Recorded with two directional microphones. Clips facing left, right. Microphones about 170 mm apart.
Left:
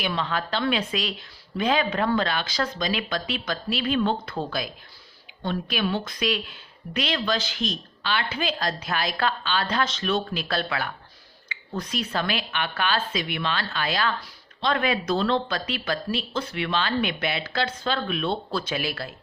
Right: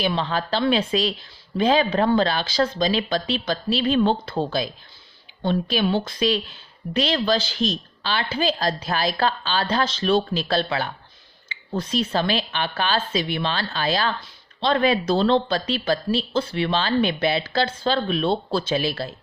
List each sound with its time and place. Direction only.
0.0 s a woman's voice: 30° right (ahead or behind)